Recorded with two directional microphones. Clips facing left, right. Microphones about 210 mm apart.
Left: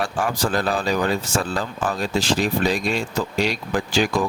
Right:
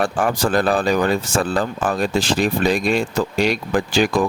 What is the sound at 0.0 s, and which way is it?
Speech, 55° right (ahead or behind).